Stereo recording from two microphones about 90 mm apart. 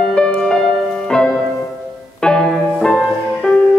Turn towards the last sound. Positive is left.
turn(degrees=5)  # may be behind; listen again after turning